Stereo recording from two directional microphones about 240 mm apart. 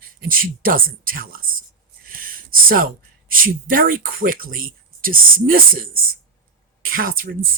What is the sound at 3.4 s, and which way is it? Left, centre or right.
Speech, right.